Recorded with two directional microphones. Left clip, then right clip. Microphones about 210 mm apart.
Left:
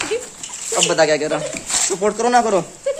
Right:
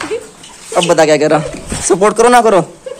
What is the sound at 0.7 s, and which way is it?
Speech, 30° right (ahead or behind).